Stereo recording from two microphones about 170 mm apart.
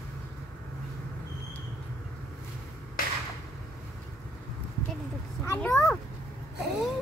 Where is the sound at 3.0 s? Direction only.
60° left (ahead or behind).